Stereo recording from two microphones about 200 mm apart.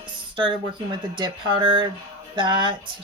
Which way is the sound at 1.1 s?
25° right (ahead or behind).